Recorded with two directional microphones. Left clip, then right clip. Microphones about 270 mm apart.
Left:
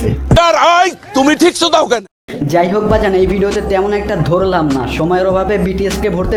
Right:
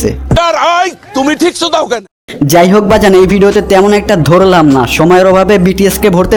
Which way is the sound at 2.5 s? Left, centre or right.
Right.